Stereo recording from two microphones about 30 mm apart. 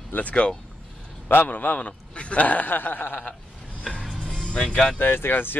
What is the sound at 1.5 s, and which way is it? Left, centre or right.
Speech, left.